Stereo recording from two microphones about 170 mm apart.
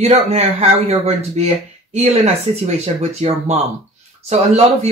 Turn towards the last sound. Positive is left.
turn(degrees=-40)  # may be behind; listen again after turning